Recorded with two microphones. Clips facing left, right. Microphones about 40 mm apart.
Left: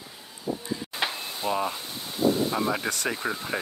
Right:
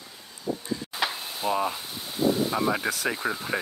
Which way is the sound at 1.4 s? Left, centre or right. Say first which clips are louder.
Right 1 dB; centre.